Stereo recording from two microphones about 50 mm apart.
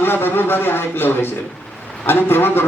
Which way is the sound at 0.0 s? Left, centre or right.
Left.